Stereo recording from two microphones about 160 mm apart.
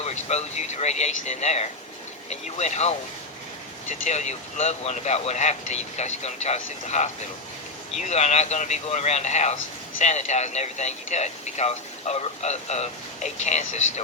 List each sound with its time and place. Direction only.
0.0 s speech: 45° left (ahead or behind)